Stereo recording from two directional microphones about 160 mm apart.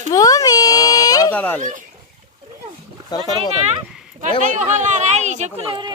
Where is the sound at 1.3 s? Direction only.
10° left (ahead or behind).